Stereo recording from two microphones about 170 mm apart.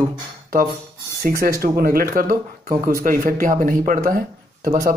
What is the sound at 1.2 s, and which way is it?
Speech, 65° right (ahead or behind).